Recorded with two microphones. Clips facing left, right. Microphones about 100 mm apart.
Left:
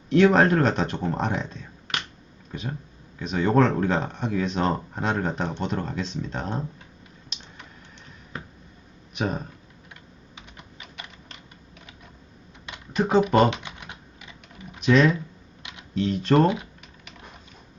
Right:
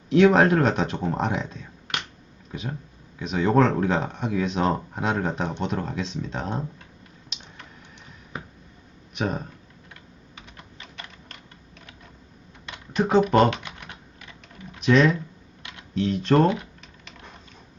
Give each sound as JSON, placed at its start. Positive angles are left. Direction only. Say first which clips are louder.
{"t": 0.1, "sound": "speech", "louder": "right 1 dB", "side_deg": 0}
{"t": 7.3, "sound": "typing", "louder": "even", "side_deg": 0}
{"t": 9.1, "sound": "speech", "louder": "even", "side_deg": 0}
{"t": 9.9, "sound": "typing", "louder": "even", "side_deg": 15}
{"t": 12.9, "sound": "speech", "louder": "right 1 dB", "side_deg": 0}
{"t": 13.5, "sound": "typing", "louder": "right 1 dB", "side_deg": 15}
{"t": 14.8, "sound": "speech", "louder": "even", "side_deg": 0}
{"t": 15.6, "sound": "computer keyboard", "louder": "even", "side_deg": 15}
{"t": 16.0, "sound": "typing", "louder": "even", "side_deg": 0}